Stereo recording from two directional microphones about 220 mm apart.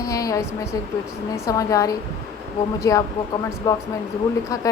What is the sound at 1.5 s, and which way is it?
A woman's voice, 15° left (ahead or behind).